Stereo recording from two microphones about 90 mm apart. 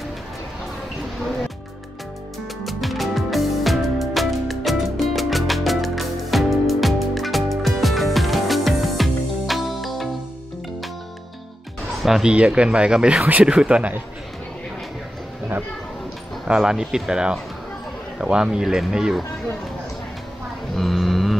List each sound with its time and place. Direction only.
2.6 s music: centre (ahead or behind)
12.0 s speech: 5° right (ahead or behind)
16.4 s speech: 5° right (ahead or behind)
20.7 s a sound: centre (ahead or behind)